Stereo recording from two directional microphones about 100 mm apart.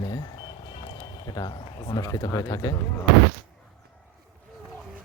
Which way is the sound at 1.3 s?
40° left (ahead or behind).